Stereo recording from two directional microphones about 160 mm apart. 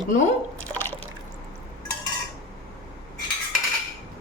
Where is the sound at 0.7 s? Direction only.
10° left (ahead or behind).